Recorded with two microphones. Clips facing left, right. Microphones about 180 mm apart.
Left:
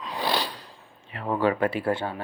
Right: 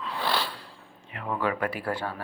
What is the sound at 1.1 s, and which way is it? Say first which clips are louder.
Speech: left 5 dB; 35° left (ahead or behind).